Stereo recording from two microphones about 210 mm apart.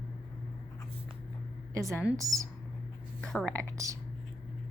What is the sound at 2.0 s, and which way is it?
Speech, 15° right (ahead or behind).